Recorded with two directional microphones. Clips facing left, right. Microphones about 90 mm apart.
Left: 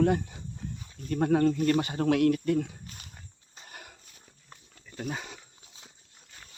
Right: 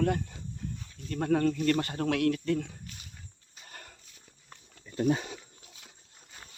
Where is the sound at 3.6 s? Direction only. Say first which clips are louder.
Left 1 dB; 10° left (ahead or behind).